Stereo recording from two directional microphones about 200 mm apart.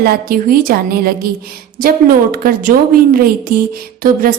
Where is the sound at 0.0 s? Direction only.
50° right (ahead or behind).